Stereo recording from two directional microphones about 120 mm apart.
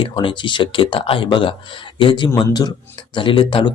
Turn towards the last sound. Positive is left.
turn(degrees=45)  # may be behind; listen again after turning